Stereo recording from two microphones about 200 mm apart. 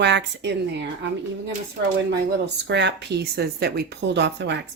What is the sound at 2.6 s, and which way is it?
Speech, 60° right (ahead or behind).